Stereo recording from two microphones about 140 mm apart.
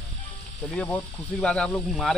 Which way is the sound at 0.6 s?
5° left (ahead or behind).